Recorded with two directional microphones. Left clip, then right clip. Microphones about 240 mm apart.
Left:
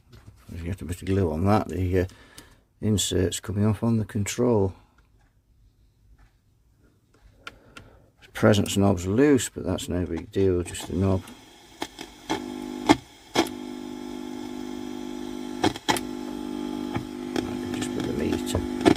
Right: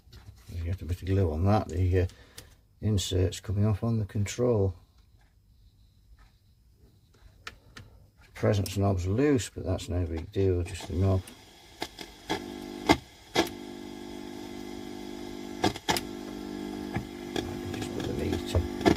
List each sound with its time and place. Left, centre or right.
0.6 s speech: left
8.3 s speech: left
12.3 s a sound: left